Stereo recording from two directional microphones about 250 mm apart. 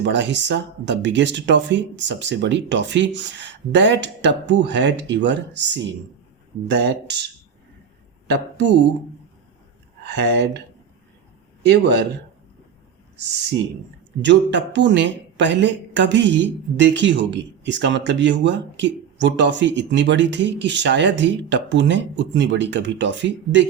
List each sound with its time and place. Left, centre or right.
0.0 s speech: right
8.3 s speech: right
10.0 s speech: right
11.6 s speech: right
14.2 s speech: right